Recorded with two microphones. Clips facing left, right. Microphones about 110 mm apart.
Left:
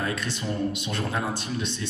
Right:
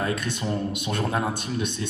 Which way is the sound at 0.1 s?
55° right (ahead or behind).